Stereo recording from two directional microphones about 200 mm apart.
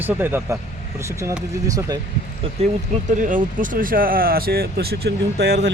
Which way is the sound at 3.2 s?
40° right (ahead or behind).